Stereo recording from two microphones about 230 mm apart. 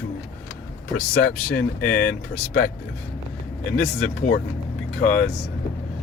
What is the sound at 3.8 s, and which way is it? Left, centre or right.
Speech, left.